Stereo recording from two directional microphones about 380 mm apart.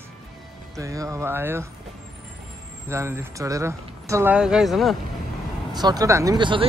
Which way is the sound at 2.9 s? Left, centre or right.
Centre.